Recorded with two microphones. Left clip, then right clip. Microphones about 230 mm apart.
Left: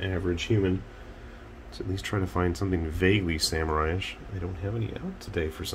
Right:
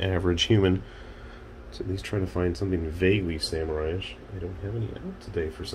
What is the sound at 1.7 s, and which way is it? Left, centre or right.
Speech, centre.